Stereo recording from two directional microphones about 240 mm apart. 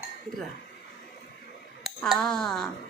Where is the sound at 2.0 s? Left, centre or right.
Centre.